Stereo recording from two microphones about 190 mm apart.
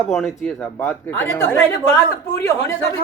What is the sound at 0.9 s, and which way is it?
A man's voice, 10° left (ahead or behind).